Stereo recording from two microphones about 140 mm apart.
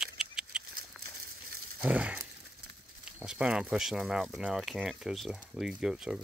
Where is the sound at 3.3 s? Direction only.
5° right (ahead or behind).